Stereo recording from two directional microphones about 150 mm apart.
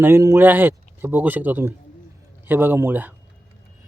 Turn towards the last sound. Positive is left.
turn(degrees=-10)  # may be behind; listen again after turning